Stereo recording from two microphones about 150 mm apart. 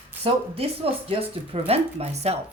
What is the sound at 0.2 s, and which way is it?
Speech, 40° right (ahead or behind).